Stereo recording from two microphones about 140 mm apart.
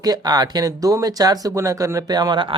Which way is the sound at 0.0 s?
30° right (ahead or behind).